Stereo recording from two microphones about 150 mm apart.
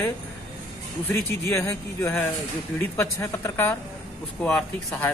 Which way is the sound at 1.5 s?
20° left (ahead or behind).